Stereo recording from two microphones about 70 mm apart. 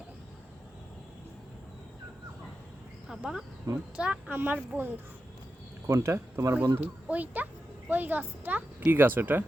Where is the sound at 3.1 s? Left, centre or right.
Centre.